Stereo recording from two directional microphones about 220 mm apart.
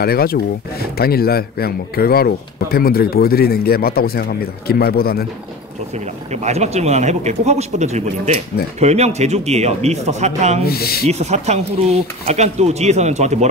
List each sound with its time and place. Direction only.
0.0 s speech: 45° left (ahead or behind)
6.3 s speech: 30° right (ahead or behind)
10.6 s speech: 45° left (ahead or behind)
11.1 s speech: 30° right (ahead or behind)